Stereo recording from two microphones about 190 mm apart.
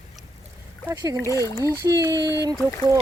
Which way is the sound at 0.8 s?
20° right (ahead or behind).